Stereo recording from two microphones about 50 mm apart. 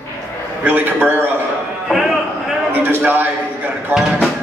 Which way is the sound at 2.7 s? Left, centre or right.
Right.